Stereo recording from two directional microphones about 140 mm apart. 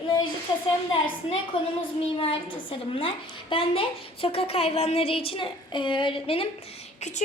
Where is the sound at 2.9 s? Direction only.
40° left (ahead or behind).